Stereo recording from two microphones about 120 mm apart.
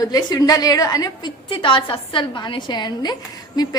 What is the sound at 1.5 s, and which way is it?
A woman's voice, 45° left (ahead or behind).